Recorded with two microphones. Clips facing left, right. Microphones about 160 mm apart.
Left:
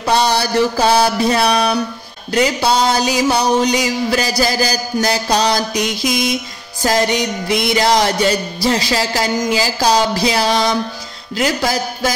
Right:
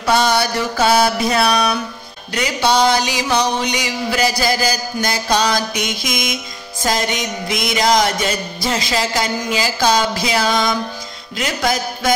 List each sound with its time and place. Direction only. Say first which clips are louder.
0.1 s music: left 1 dB; 35° left (ahead or behind)